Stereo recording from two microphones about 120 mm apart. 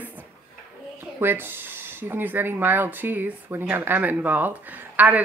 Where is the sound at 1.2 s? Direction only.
20° right (ahead or behind).